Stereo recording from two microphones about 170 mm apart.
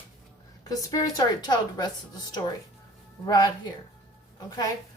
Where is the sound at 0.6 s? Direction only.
20° left (ahead or behind).